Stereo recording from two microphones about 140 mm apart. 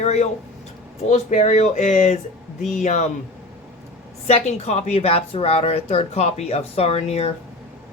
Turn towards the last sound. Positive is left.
turn(degrees=50)  # may be behind; listen again after turning